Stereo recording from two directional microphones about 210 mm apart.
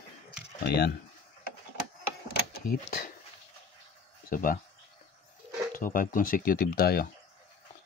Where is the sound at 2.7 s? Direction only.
40° left (ahead or behind).